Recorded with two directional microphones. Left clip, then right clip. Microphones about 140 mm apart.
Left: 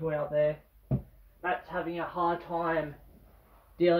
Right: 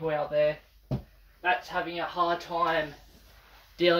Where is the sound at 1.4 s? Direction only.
20° right (ahead or behind).